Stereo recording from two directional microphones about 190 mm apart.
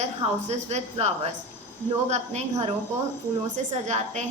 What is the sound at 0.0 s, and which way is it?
A woman's voice, 35° right (ahead or behind).